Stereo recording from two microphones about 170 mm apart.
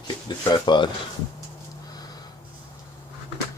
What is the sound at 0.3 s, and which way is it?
Speech, 25° left (ahead or behind).